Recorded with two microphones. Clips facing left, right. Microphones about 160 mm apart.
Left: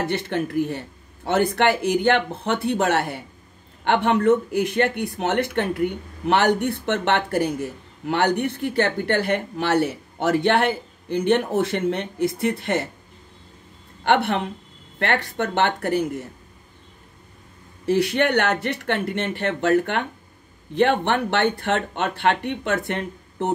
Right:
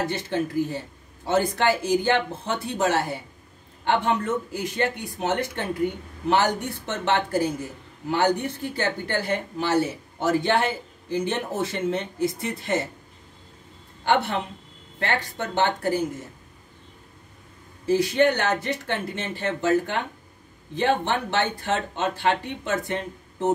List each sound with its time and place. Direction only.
0.0 s speech: 65° left (ahead or behind)
14.0 s speech: 65° left (ahead or behind)
17.8 s speech: 65° left (ahead or behind)